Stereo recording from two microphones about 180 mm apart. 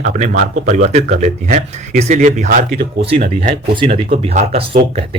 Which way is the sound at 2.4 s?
55° right (ahead or behind).